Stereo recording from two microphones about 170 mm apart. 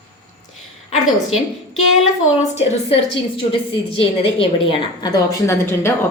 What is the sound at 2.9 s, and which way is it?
A woman's voice, 35° left (ahead or behind).